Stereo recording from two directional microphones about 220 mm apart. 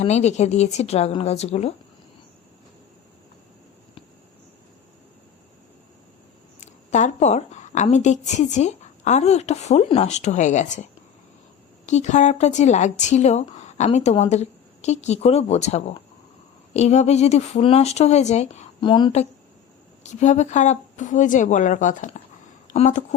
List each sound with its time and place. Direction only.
0.0 s speech: 30° left (ahead or behind)
6.6 s a woman's voice: 30° left (ahead or behind)
11.9 s a woman's voice: 30° left (ahead or behind)